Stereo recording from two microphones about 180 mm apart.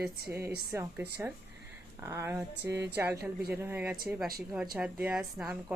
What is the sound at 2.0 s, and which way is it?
A woman's voice, 15° right (ahead or behind).